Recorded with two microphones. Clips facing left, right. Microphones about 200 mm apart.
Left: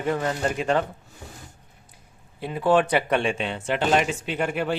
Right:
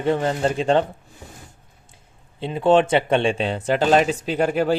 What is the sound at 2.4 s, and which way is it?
Speech, 25° right (ahead or behind).